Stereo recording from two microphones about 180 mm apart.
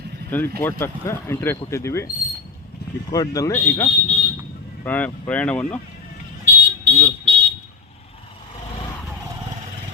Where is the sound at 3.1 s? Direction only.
20° left (ahead or behind).